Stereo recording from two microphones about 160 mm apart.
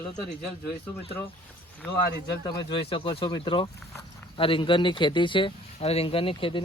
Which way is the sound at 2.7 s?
30° left (ahead or behind).